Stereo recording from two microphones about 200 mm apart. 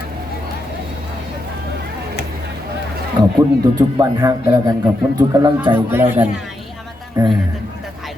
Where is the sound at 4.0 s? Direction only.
20° right (ahead or behind); by 6.9 s centre (ahead or behind).